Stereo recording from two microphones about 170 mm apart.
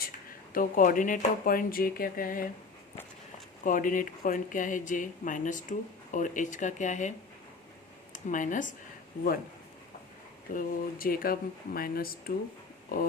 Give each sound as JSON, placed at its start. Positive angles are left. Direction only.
{"t": 0.5, "sound": "speech", "side_deg": 55}
{"t": 3.6, "sound": "speech", "side_deg": 50}
{"t": 8.1, "sound": "speech", "side_deg": 50}
{"t": 10.5, "sound": "speech", "side_deg": 55}